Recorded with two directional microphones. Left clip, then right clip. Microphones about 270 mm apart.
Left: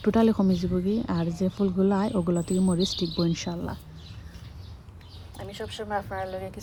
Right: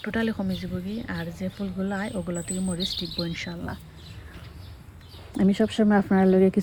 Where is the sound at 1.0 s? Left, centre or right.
Right.